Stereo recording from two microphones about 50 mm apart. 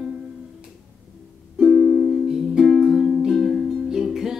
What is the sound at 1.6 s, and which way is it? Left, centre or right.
Music, centre.